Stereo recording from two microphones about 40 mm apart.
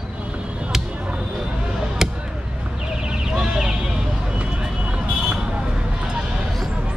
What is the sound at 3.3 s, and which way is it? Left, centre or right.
Vehicle, centre.